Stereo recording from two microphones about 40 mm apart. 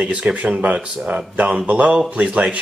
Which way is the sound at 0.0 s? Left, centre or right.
Right.